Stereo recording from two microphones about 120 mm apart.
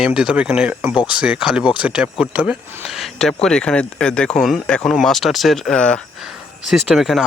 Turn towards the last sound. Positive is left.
turn(degrees=0)  # may be behind; listen again after turning